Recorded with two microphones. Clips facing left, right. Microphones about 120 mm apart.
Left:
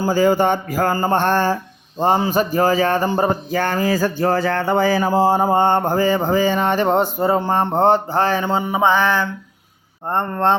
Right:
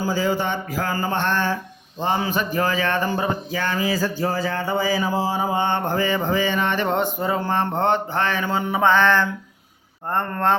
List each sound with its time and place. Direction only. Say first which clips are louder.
0.0 s mantra: left 7 dB; 50° left (ahead or behind)
0.9 s a sound: left 4 dB; 40° left (ahead or behind)
2.0 s mantra: left 6 dB; 45° left (ahead or behind)
2.2 s a sound: left 6 dB; 35° left (ahead or behind)
8.6 s mantra: right 1 dB; 15° left (ahead or behind)
10.1 s speech: left 3 dB; 20° left (ahead or behind)